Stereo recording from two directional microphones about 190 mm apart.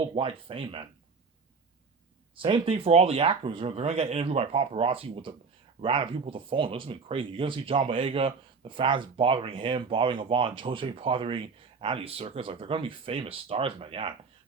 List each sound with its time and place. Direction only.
0.0 s speech: 25° right (ahead or behind)
2.3 s speech: 25° right (ahead or behind)